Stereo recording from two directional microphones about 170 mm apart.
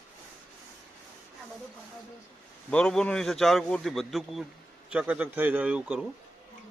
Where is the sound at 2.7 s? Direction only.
5° left (ahead or behind).